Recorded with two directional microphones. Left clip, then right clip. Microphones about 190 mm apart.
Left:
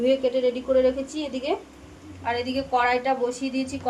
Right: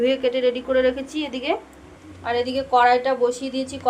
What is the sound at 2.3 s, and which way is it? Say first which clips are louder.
A woman's voice: right 4 dB; 15° right (ahead or behind).